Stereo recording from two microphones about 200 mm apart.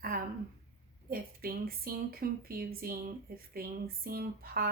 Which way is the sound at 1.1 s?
50° right (ahead or behind).